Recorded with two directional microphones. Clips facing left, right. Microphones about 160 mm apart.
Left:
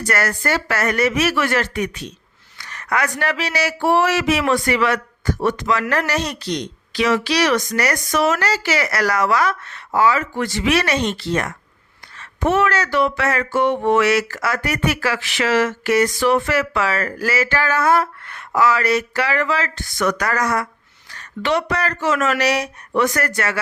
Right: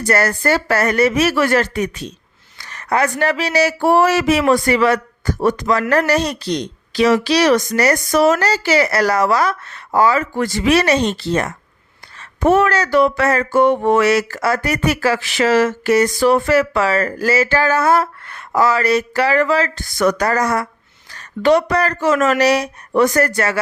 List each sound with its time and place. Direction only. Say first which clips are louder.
0.0 s speech: right 5 dB; 30° right (ahead or behind)